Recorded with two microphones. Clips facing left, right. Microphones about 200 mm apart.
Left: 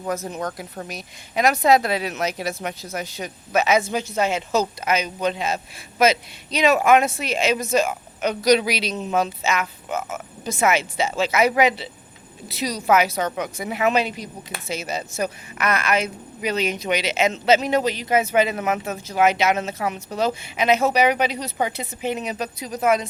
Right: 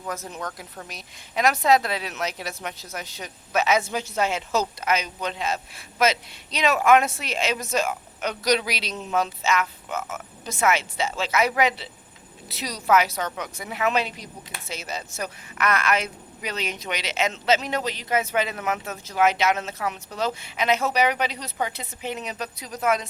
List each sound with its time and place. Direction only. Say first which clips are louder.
1.4 s speech: left 3 dB; 5° left (ahead or behind)
9.9 s a man's voice: left 4 dB; 15° left (ahead or behind)
13.1 s a man's voice: left 5 dB; 15° left (ahead or behind)